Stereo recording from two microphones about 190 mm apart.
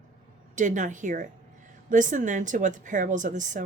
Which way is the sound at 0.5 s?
40° right (ahead or behind).